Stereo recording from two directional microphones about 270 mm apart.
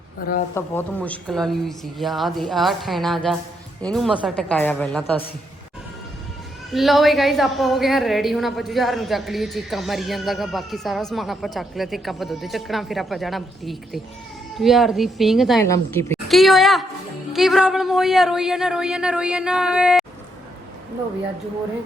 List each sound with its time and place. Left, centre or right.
0.5 s a woman's voice: centre
6.7 s a woman's voice: centre
15.6 s a woman's voice: centre